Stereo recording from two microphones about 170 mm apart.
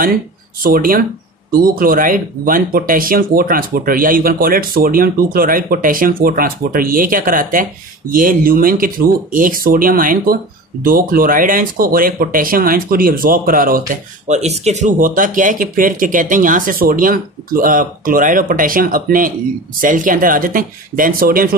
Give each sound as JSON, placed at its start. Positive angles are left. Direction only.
{"t": 0.7, "sound": "speech", "side_deg": -55}